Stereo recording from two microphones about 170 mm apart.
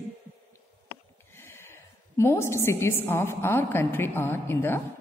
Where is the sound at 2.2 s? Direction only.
15° left (ahead or behind).